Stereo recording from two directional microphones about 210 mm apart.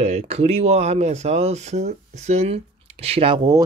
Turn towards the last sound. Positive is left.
turn(degrees=-30)  # may be behind; listen again after turning